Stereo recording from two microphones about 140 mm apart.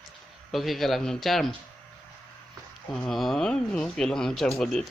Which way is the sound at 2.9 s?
Centre (ahead or behind).